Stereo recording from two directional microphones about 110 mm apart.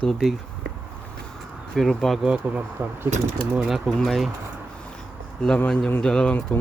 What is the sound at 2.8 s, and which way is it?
Speech, 20° right (ahead or behind).